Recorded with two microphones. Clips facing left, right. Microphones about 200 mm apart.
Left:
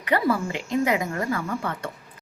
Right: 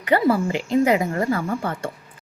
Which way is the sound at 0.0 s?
30° right (ahead or behind).